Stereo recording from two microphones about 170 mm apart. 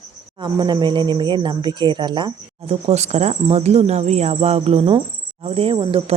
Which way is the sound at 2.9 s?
40° right (ahead or behind).